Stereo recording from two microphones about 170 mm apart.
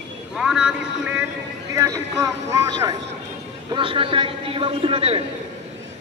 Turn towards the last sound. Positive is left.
turn(degrees=-35)  # may be behind; listen again after turning